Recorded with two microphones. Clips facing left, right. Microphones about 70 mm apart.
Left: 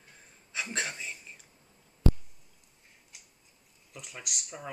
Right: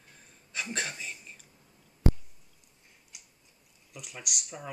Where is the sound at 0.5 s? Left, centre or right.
Centre.